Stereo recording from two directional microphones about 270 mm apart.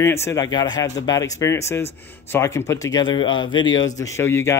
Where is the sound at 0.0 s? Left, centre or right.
Centre.